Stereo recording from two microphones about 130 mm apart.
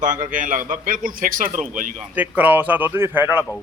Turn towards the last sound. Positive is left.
turn(degrees=-15)  # may be behind; listen again after turning